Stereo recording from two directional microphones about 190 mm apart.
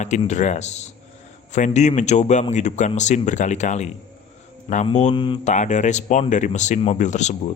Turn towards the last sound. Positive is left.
turn(degrees=40)  # may be behind; listen again after turning